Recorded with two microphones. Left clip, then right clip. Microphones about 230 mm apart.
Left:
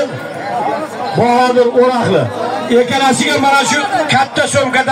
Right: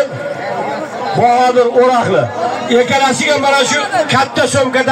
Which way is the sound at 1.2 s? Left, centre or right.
Right.